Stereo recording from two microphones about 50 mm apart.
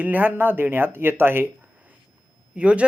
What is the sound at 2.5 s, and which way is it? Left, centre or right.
Speech, right.